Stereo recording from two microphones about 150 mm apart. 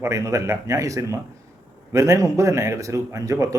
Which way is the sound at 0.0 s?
20° right (ahead or behind).